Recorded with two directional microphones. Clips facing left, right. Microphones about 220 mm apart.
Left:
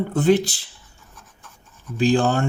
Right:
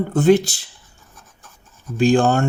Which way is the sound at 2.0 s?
50° right (ahead or behind).